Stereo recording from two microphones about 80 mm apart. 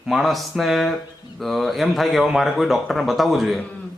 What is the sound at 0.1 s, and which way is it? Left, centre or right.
Speech, centre.